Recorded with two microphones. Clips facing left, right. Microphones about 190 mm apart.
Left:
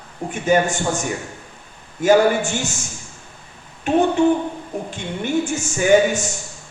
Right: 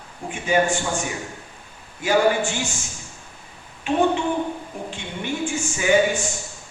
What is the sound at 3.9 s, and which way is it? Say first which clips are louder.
A woman's voice: left 5 dB; 45° left (ahead or behind).